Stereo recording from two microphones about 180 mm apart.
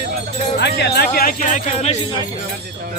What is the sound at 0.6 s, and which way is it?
Speech, 65° left (ahead or behind).